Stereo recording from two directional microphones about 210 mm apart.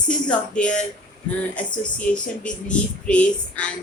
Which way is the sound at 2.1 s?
5° left (ahead or behind).